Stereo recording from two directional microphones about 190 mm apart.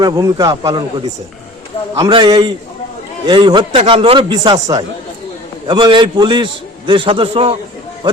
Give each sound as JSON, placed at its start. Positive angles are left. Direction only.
{"t": 0.0, "sound": "a man's voice", "side_deg": -20}